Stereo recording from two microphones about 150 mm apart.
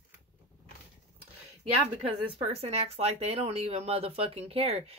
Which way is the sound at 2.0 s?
45° right (ahead or behind).